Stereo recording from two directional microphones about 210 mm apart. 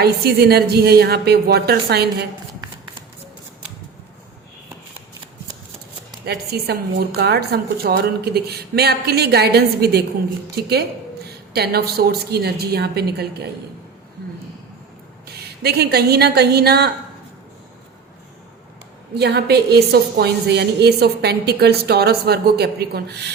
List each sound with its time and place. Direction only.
0.0 s a woman's voice: 50° right (ahead or behind)
6.2 s a woman's voice: 50° right (ahead or behind)
15.6 s a woman's voice: 50° right (ahead or behind)
19.1 s a woman's voice: 50° right (ahead or behind)